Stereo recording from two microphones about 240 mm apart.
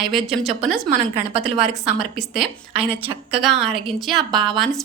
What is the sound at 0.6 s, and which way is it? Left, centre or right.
Speech, right.